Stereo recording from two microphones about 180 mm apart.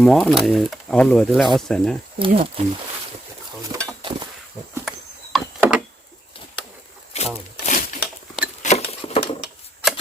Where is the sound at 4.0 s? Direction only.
30° right (ahead or behind).